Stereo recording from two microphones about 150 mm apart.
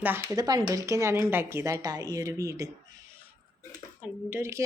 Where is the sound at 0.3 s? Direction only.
25° right (ahead or behind).